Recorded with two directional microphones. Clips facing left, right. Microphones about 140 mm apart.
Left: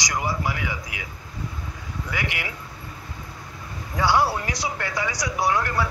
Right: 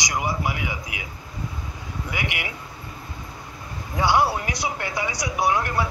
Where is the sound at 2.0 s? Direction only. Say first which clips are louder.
Even; 15° right (ahead or behind).